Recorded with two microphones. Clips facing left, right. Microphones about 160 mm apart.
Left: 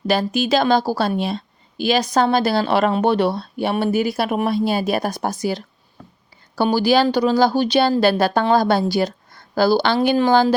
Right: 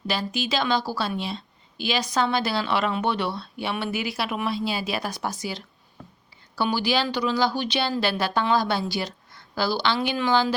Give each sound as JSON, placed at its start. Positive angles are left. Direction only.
{"t": 0.1, "sound": "a woman's voice", "side_deg": 45}